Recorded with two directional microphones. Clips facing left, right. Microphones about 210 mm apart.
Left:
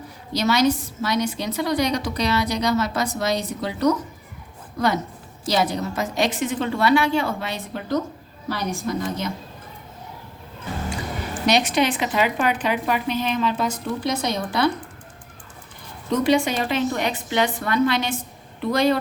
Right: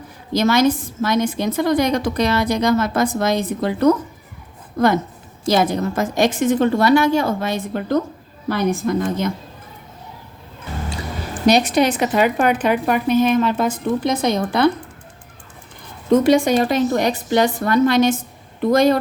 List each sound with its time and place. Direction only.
0.3 s a woman's voice: 50° right (ahead or behind)
11.5 s a woman's voice: 40° right (ahead or behind); by 14.7 s 55° right (ahead or behind)
16.0 s a woman's voice: 50° right (ahead or behind)